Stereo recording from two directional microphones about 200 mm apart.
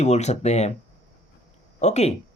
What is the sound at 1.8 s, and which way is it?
Speech, 35° left (ahead or behind).